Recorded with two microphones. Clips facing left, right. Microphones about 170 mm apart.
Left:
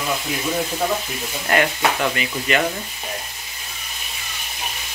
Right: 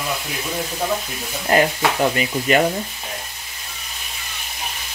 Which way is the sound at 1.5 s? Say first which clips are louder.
Right 2 dB; 30° right (ahead or behind).